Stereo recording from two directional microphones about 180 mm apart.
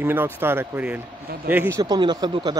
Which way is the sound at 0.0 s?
10° right (ahead or behind).